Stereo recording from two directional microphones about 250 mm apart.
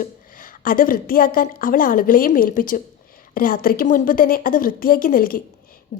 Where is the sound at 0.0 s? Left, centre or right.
Left.